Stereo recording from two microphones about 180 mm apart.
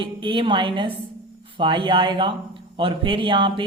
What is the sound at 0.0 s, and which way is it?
Speech, 25° right (ahead or behind).